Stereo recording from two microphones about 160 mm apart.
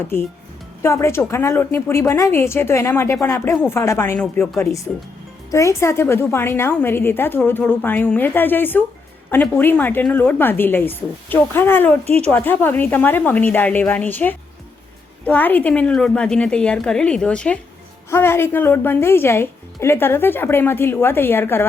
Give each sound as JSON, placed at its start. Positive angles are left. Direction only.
{"t": 0.8, "sound": "a woman's voice", "side_deg": 15}